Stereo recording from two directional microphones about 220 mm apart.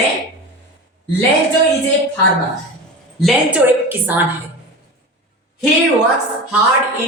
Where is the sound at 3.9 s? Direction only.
10° right (ahead or behind).